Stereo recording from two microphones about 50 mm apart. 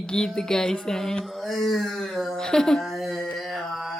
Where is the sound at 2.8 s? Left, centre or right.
Centre.